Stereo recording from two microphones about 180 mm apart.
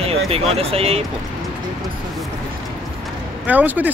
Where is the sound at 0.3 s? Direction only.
35° right (ahead or behind).